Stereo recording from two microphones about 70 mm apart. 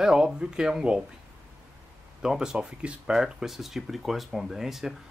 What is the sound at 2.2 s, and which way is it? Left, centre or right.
Speech, centre.